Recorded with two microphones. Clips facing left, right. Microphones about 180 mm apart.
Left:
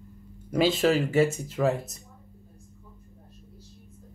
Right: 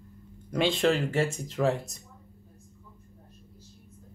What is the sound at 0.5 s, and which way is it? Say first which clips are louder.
Speech: left 2 dB; 5° left (ahead or behind).